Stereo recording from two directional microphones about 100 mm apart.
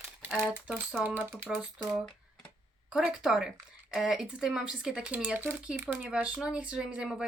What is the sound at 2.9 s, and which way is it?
Speech, 5° right (ahead or behind).